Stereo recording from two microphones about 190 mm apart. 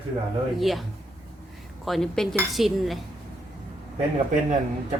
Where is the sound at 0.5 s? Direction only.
Centre (ahead or behind).